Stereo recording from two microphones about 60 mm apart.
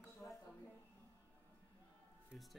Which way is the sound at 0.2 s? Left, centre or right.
Left.